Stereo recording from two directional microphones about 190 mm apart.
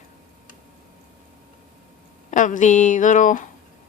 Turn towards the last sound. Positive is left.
turn(degrees=40)  # may be behind; listen again after turning